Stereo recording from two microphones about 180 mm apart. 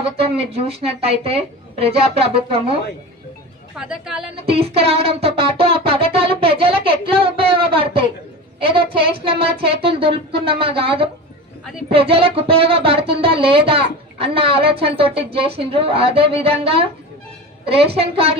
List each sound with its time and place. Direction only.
0.0 s a woman's voice: 35° right (ahead or behind)
3.7 s speech: 5° right (ahead or behind)
4.5 s music: 30° right (ahead or behind)
8.5 s a woman's voice: 30° right (ahead or behind)